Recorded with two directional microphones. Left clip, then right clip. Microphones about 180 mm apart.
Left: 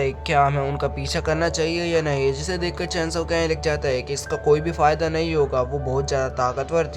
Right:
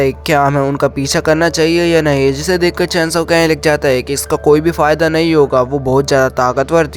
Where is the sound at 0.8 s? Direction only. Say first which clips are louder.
Right 11 dB; 50° right (ahead or behind).